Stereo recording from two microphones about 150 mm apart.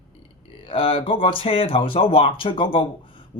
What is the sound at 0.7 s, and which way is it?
Speech, 35° left (ahead or behind).